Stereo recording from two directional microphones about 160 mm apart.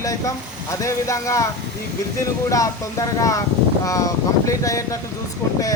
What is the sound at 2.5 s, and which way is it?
Speech, 20° left (ahead or behind).